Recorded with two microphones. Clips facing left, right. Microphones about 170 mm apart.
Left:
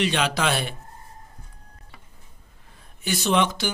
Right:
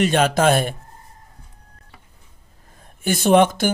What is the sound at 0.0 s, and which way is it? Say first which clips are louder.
Speech: right 7 dB; 45° right (ahead or behind).